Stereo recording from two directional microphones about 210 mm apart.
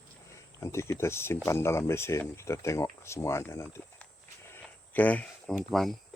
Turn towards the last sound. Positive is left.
turn(degrees=0)  # may be behind; listen again after turning